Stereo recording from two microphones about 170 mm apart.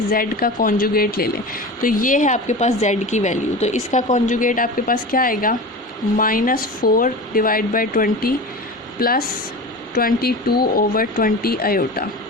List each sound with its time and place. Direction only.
0.1 s speech: 60° left (ahead or behind)